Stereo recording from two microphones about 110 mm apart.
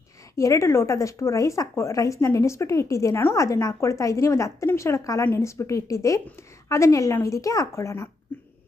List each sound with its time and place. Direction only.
0.3 s a woman's voice: 30° left (ahead or behind)